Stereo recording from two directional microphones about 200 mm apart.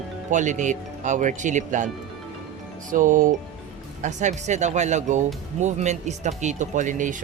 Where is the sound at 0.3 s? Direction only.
40° right (ahead or behind).